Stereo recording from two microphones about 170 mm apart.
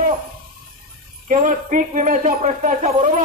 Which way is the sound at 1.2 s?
50° right (ahead or behind).